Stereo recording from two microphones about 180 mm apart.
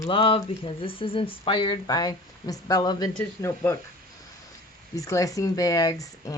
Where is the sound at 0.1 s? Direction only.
30° left (ahead or behind); by 3.8 s 15° left (ahead or behind).